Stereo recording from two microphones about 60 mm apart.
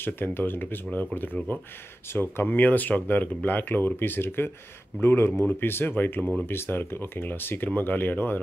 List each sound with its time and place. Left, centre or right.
0.0 s speech: left
2.1 s speech: left
2.4 s speech: left